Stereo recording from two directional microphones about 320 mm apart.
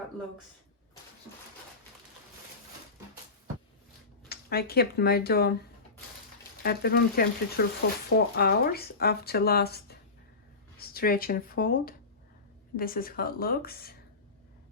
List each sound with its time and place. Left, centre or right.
4.3 s speech: left
6.6 s speech: left